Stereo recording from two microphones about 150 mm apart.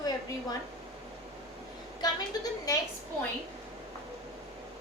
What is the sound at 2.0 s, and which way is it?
Speech, 25° left (ahead or behind).